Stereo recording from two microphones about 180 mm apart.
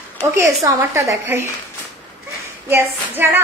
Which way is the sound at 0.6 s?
15° right (ahead or behind).